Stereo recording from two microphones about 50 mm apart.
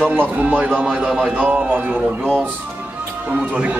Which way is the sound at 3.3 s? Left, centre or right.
Right.